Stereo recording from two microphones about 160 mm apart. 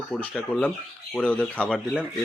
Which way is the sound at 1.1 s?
5° left (ahead or behind).